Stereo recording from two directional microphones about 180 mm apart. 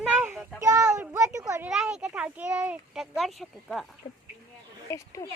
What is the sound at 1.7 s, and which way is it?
Speech, 5° right (ahead or behind).